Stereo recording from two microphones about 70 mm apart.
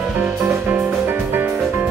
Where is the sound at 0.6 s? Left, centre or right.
Right.